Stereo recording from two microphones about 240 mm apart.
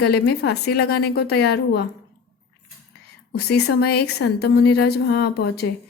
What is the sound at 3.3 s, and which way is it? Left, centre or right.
Speech, left.